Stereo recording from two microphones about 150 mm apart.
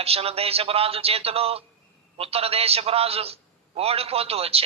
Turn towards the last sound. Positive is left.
turn(degrees=-40)  # may be behind; listen again after turning